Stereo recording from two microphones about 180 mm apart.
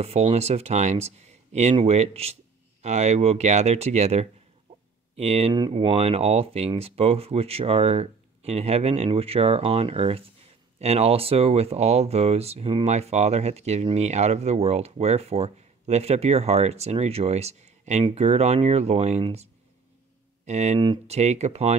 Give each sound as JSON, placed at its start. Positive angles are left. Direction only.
{"t": 0.0, "sound": "speech", "side_deg": -35}